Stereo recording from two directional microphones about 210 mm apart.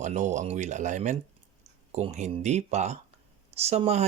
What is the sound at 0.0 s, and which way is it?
Speech, 35° right (ahead or behind).